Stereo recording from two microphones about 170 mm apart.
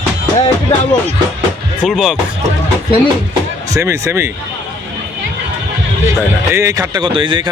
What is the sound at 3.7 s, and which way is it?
Speech, 20° right (ahead or behind).